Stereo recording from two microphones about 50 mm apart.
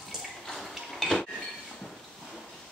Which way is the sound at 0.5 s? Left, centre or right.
Centre.